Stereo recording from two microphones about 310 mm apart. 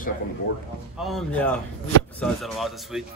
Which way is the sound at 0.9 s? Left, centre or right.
Centre.